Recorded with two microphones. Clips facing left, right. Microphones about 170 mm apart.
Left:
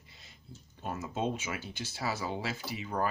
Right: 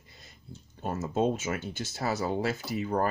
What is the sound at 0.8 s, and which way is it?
Speech, 45° right (ahead or behind).